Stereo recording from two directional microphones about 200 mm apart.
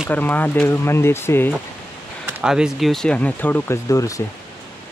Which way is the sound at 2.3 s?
5° right (ahead or behind).